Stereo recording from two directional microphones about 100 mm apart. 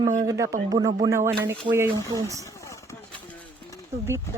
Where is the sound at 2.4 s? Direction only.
30° left (ahead or behind).